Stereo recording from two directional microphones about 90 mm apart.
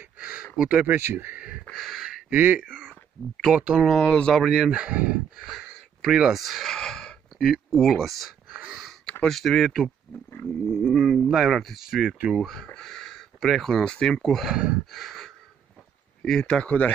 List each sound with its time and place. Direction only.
0.0 s a sound: 15° right (ahead or behind)
0.6 s speech: 15° right (ahead or behind)
1.7 s a sound: centre (ahead or behind)
2.3 s speech: 20° right (ahead or behind)
2.6 s speech: 10° right (ahead or behind)
3.8 s speech: 5° left (ahead or behind)
7.3 s speech: 5° right (ahead or behind)
8.5 s a sound: 15° right (ahead or behind)
9.2 s speech: 5° left (ahead or behind)
14.5 s speech: 10° right (ahead or behind)
14.9 s gasp: centre (ahead or behind)
16.3 s speech: 10° left (ahead or behind)